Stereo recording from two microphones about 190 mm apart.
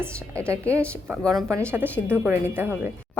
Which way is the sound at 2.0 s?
10° right (ahead or behind).